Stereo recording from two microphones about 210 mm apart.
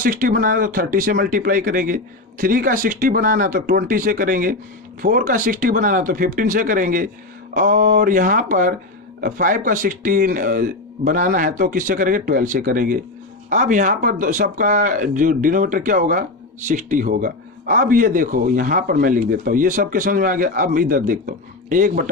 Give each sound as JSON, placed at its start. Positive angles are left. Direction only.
{"t": 0.0, "sound": "speech", "side_deg": -40}